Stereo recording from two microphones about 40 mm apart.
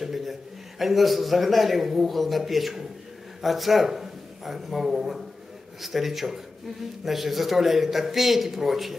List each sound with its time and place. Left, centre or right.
0.0 s a man's voice: centre